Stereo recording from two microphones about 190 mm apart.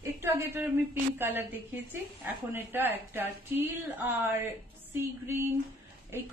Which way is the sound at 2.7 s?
10° right (ahead or behind).